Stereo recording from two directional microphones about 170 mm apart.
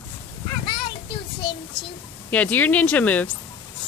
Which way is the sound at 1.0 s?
30° left (ahead or behind).